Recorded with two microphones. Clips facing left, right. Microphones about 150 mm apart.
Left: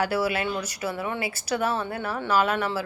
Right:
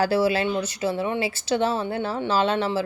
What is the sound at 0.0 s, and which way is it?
Speech, 30° right (ahead or behind).